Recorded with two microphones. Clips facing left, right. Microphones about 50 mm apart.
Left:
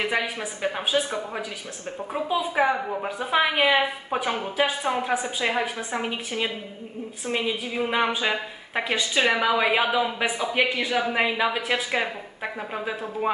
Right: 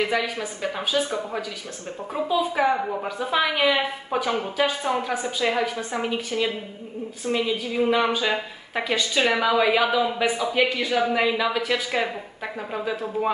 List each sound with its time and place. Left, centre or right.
0.0 s a woman's voice: left
10.0 s a woman's voice: centre